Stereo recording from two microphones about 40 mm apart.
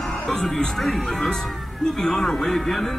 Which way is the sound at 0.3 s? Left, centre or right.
Centre.